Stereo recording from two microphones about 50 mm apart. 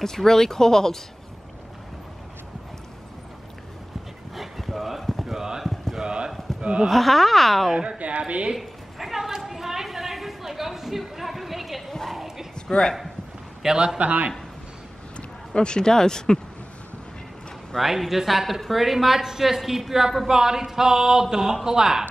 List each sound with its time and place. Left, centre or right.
0.0 s speech: centre
4.4 s clip-clop: centre
6.6 s speech: right
6.9 s a woman's voice: centre
7.7 s a woman's voice: centre
8.5 s a sound: centre
13.6 s a woman's voice: centre
15.1 s speech: centre
17.7 s a woman's voice: centre